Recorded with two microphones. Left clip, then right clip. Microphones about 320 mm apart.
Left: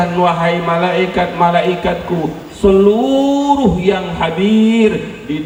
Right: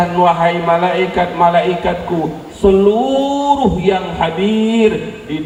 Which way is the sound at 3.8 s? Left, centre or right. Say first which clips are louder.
Even; right.